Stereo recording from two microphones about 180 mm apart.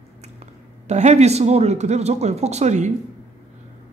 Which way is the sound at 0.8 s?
40° right (ahead or behind).